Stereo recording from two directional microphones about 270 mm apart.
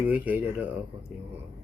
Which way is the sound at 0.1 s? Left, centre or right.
Centre.